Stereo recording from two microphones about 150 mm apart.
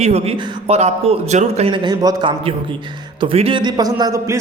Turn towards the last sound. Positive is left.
turn(degrees=-20)  # may be behind; listen again after turning